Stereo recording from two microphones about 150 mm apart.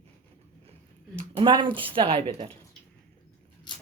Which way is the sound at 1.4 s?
35° right (ahead or behind).